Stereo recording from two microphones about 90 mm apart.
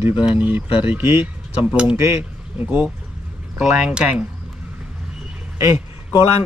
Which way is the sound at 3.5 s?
10° right (ahead or behind).